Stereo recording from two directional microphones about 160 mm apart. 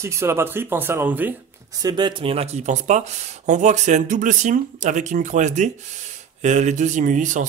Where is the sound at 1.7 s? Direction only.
25° right (ahead or behind).